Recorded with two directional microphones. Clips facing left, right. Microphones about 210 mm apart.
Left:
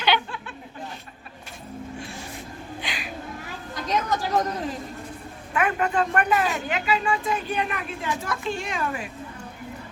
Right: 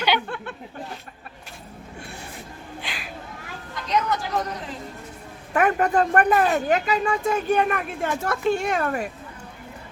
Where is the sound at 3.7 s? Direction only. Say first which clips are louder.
Right 1 dB; 40° left (ahead or behind).